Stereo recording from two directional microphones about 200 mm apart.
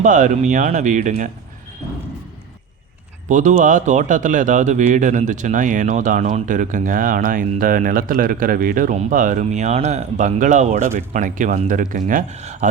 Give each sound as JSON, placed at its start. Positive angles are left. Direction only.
{"t": 0.0, "sound": "speech", "side_deg": -40}
{"t": 3.2, "sound": "speech", "side_deg": -40}